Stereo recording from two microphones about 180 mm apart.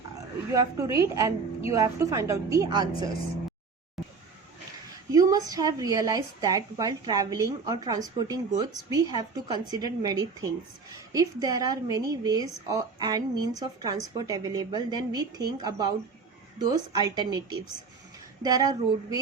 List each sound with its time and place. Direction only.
0.5 s a woman's voice: 20° right (ahead or behind)
5.1 s a woman's voice: 20° right (ahead or behind)